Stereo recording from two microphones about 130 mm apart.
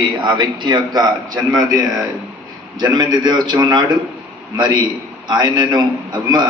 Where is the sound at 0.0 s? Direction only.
35° right (ahead or behind).